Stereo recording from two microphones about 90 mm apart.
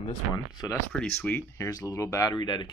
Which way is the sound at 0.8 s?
20° left (ahead or behind).